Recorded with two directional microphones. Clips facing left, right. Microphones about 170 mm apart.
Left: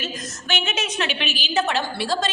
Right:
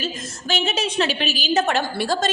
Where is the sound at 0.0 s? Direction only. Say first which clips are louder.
Right 3 dB; 35° right (ahead or behind).